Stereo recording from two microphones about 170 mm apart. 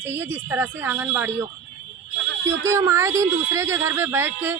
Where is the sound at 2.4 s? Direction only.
15° right (ahead or behind).